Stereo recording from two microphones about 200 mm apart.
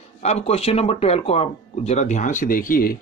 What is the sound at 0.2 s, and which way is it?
Speech, 30° left (ahead or behind).